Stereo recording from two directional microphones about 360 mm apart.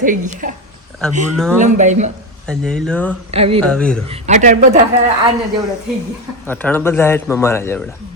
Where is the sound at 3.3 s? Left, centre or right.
Centre.